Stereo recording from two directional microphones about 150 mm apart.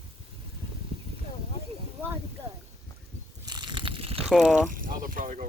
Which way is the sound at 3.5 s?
30° right (ahead or behind).